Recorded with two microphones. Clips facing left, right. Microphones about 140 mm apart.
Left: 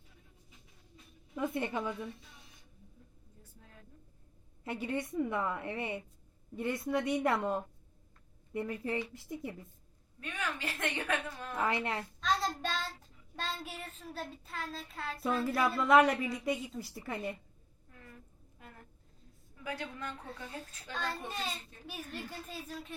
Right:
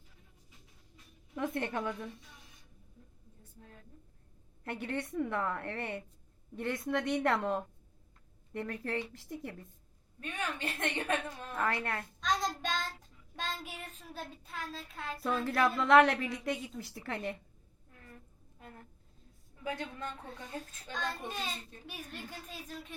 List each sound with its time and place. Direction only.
1.4 s a woman's voice: 5° left (ahead or behind)
4.6 s a woman's voice: 10° left (ahead or behind)
10.2 s a woman's voice: 25° right (ahead or behind)
11.5 s a woman's voice: 15° left (ahead or behind)
12.2 s child singing: 5° left (ahead or behind)
13.7 s a woman's voice: 5° left (ahead or behind)
19.6 s a woman's voice: 20° right (ahead or behind)
21.2 s a woman's voice: 5° left (ahead or behind)